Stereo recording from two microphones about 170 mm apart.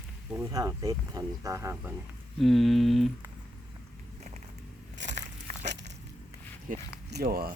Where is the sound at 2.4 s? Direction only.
Centre (ahead or behind).